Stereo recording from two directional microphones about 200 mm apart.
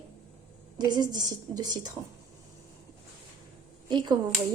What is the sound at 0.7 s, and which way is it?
Speech, 20° right (ahead or behind).